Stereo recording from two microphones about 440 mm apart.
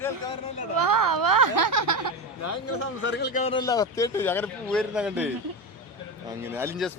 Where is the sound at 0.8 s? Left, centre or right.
Right.